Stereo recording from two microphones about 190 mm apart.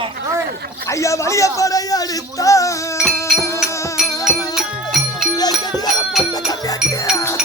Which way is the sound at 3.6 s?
15° left (ahead or behind).